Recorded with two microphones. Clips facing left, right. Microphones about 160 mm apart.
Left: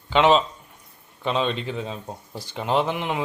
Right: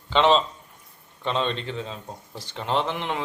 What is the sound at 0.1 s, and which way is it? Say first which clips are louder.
Speech: left 2 dB; 5° left (ahead or behind).